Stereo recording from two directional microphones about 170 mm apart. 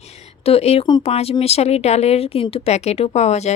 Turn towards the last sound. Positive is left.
turn(degrees=40)  # may be behind; listen again after turning